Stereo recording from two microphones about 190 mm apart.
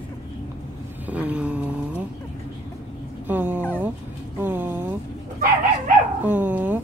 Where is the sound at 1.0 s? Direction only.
5° right (ahead or behind).